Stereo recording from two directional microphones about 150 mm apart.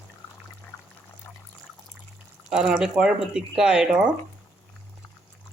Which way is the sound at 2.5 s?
5° right (ahead or behind).